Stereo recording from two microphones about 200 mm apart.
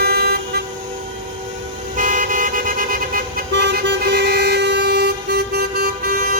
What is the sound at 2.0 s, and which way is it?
Vehicle, 40° right (ahead or behind).